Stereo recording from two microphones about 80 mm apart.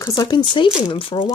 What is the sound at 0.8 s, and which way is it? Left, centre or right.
Speech, left.